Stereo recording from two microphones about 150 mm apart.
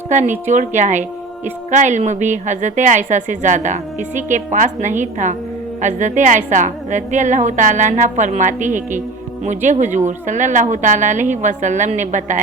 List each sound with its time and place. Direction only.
0.1 s a woman's voice: 55° right (ahead or behind)